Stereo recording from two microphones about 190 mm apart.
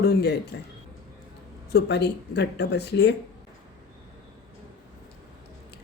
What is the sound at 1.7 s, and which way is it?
Speech, 60° left (ahead or behind).